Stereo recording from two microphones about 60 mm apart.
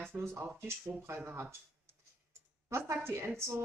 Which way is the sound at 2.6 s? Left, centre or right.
Right.